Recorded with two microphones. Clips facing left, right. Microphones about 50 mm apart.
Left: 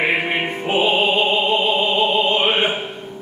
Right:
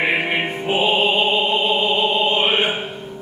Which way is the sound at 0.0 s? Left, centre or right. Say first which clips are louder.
Even; centre.